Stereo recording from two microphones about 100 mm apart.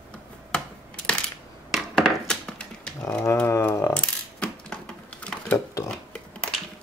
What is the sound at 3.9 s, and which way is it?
Coin, 10° left (ahead or behind).